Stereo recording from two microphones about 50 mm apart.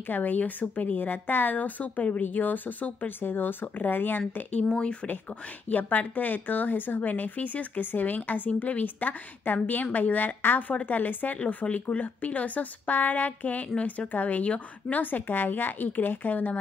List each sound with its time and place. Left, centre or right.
0.1 s a woman's voice: left
4.7 s speech: left
5.7 s a woman's voice: left